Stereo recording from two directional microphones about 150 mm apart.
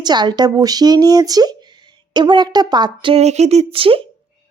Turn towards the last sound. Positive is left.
turn(degrees=-35)  # may be behind; listen again after turning